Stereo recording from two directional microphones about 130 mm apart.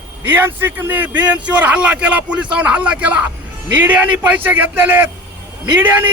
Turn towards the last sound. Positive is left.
turn(degrees=-15)  # may be behind; listen again after turning